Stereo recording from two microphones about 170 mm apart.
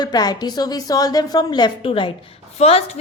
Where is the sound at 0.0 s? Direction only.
25° left (ahead or behind).